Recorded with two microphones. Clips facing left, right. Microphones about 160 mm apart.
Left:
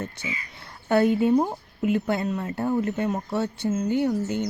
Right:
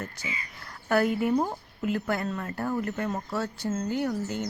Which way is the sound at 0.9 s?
25° left (ahead or behind).